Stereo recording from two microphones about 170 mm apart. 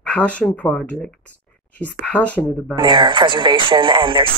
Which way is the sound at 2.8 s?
25° right (ahead or behind).